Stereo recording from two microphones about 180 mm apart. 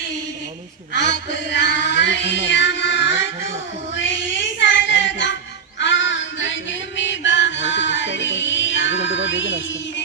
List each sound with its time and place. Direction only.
0.9 s child singing: 75° left (ahead or behind); by 5.3 s 90° left
5.8 s music: 90° left